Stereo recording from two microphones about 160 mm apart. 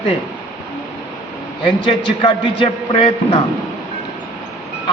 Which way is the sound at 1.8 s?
30° left (ahead or behind).